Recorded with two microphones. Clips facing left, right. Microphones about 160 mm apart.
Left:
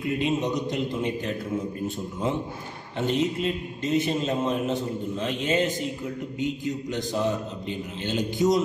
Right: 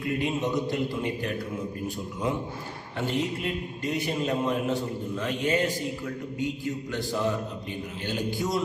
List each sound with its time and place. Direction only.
0.2 s a man's voice: 20° left (ahead or behind)
3.0 s a man's voice: 20° left (ahead or behind)